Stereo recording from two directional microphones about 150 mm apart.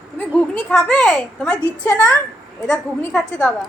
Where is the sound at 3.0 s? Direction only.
10° left (ahead or behind).